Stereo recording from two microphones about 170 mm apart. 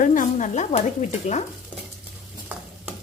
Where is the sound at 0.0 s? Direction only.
50° left (ahead or behind).